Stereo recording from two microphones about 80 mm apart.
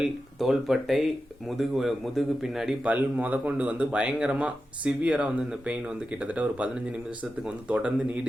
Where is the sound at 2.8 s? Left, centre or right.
Centre.